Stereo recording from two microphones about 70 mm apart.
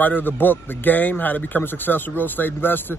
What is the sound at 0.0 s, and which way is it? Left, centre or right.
Speech, left.